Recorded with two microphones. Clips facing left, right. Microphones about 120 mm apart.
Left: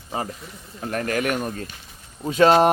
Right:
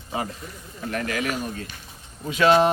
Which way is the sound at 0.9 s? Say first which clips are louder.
Left 3 dB; 45° left (ahead or behind).